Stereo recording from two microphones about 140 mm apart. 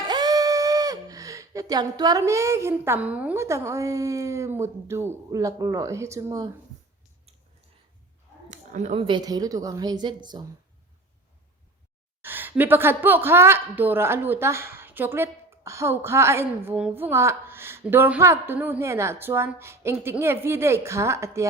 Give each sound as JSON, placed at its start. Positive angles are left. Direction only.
{"t": 0.0, "sound": "speech", "side_deg": -30}
{"t": 8.4, "sound": "a sound", "side_deg": -60}
{"t": 9.0, "sound": "a woman's voice", "side_deg": -35}
{"t": 12.2, "sound": "a woman's voice", "side_deg": -15}